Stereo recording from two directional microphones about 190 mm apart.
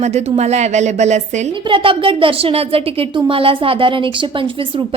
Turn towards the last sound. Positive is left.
turn(degrees=-25)  # may be behind; listen again after turning